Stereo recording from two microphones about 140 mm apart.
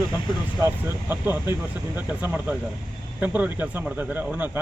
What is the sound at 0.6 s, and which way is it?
Speech, 15° right (ahead or behind).